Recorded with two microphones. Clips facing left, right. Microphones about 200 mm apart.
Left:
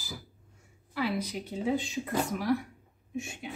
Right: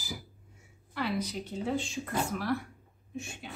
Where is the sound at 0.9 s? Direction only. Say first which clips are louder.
Left 1 dB; 10° left (ahead or behind).